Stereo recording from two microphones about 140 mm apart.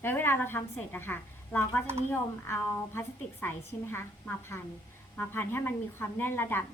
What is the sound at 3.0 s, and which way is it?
A woman's voice, 15° left (ahead or behind).